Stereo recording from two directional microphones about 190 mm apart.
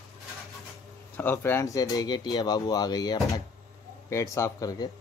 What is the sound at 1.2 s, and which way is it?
Speech, 10° left (ahead or behind).